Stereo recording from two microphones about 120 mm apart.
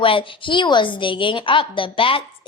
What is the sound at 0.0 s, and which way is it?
A woman's voice, 45° left (ahead or behind).